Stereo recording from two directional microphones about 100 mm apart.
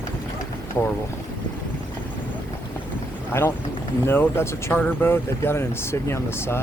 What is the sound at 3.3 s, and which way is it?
Speech, 25° left (ahead or behind).